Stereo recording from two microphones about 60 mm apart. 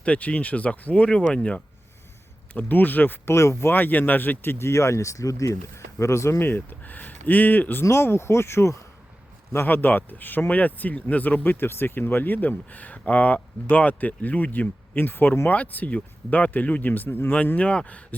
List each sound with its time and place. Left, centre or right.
0.0 s speech: left
2.5 s speech: left
3.2 s speech: left
3.7 s speech: left
6.4 s speech: left
7.9 s speech: left
9.6 s speech: left
17.3 s speech: left